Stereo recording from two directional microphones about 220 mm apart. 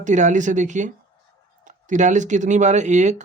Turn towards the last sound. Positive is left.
turn(degrees=-35)  # may be behind; listen again after turning